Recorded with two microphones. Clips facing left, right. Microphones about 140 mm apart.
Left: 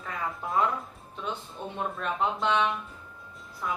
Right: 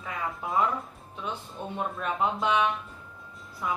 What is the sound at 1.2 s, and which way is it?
Speech, 5° right (ahead or behind).